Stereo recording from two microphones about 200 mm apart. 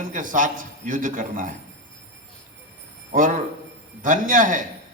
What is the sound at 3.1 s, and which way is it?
A man's voice, 45° right (ahead or behind).